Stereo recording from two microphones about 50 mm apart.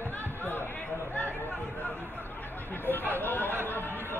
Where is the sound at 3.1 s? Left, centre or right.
Left.